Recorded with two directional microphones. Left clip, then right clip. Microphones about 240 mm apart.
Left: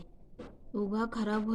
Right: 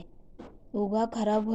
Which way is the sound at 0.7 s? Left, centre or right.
Left.